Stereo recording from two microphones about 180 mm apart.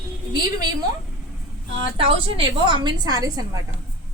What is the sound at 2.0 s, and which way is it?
A woman's voice, 30° right (ahead or behind).